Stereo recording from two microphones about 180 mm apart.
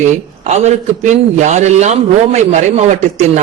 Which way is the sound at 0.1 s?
40° right (ahead or behind).